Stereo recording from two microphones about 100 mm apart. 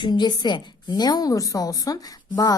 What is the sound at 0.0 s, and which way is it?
A woman's voice, 45° left (ahead or behind).